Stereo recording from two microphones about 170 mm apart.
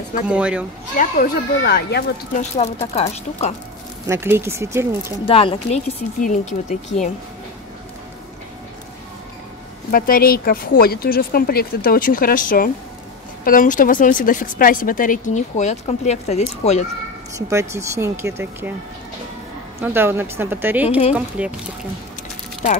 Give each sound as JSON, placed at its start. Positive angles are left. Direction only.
{"t": 0.3, "sound": "speech", "side_deg": -5}
{"t": 0.9, "sound": "speech", "side_deg": 55}
{"t": 2.3, "sound": "a woman's voice", "side_deg": 40}
{"t": 4.1, "sound": "speech", "side_deg": -15}
{"t": 5.2, "sound": "speech", "side_deg": 30}
{"t": 9.8, "sound": "a woman's voice", "side_deg": 60}
{"t": 17.4, "sound": "speech", "side_deg": -15}
{"t": 19.8, "sound": "speech", "side_deg": -15}